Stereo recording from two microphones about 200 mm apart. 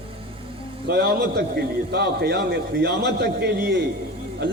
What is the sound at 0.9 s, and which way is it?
A man's voice, 55° right (ahead or behind).